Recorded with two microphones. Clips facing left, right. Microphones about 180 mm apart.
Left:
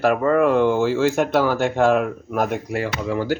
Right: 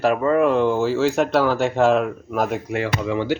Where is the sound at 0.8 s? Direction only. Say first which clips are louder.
Even; centre (ahead or behind).